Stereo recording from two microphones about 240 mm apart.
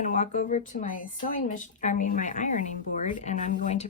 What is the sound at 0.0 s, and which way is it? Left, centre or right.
A woman's voice, left.